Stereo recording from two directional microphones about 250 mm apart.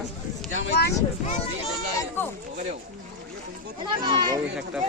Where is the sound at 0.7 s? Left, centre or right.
Left.